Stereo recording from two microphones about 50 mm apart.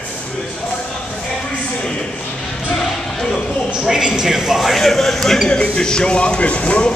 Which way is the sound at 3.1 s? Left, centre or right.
Centre.